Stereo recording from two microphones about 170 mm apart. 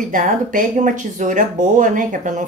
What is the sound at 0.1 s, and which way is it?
Speech, 50° right (ahead or behind).